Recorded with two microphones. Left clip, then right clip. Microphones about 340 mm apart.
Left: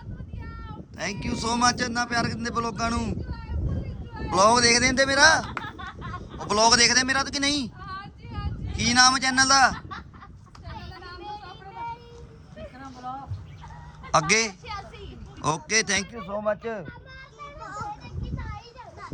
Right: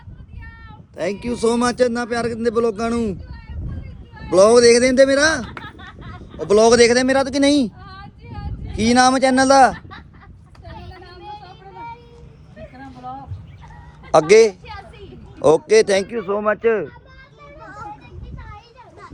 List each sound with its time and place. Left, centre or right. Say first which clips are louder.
0.9 s a man's voice: right 8 dB; centre
4.3 s a man's voice: right 8 dB; centre
11.2 s vehicle: right 4 dB; centre
14.1 s a sound: right 11 dB; centre
15.4 s a man's voice: right 12 dB; centre
17.6 s children playing: right 1 dB; centre
18.3 s children playing: right 1 dB; left